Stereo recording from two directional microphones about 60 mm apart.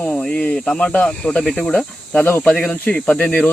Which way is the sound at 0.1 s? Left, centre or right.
Centre.